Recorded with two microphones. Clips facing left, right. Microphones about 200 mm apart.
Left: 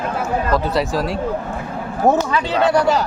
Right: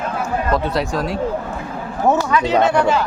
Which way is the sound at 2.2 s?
30° left (ahead or behind).